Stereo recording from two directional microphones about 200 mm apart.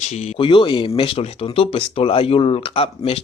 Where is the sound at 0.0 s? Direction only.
35° left (ahead or behind).